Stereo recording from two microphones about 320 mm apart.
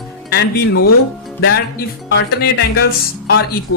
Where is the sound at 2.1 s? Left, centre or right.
Left.